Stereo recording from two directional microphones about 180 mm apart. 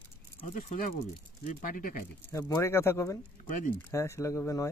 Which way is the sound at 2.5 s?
15° left (ahead or behind).